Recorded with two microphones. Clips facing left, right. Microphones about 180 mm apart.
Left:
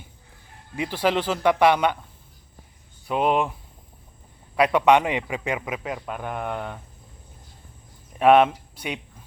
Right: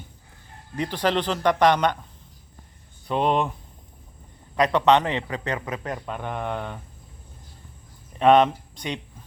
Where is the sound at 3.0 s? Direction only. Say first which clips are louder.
Left 1 dB; 5° left (ahead or behind).